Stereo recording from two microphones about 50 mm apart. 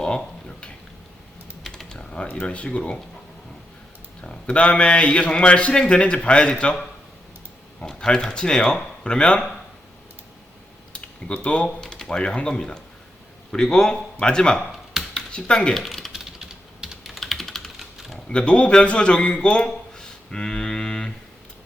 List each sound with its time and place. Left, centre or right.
0.0 s a sound: centre
1.7 s typing: centre
2.2 s speech: left
4.4 s speech: left
10.9 s a sound: left
11.8 s a man's voice: centre
15.1 s a sound: left
15.7 s typewriter: centre
16.1 s typing: centre
17.0 s computer keyboard: centre
18.3 s a man's voice: left